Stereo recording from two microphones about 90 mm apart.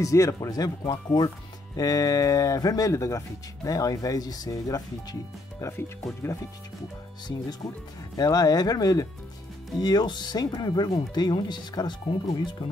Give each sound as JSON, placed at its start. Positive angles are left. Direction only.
{"t": 0.0, "sound": "speech", "side_deg": 35}
{"t": 5.6, "sound": "speech", "side_deg": 30}
{"t": 8.2, "sound": "speech", "side_deg": 45}